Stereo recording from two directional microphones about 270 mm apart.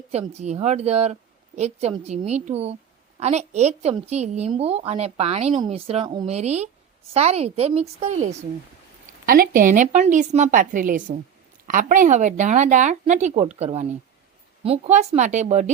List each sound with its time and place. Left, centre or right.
0.1 s a woman's voice: right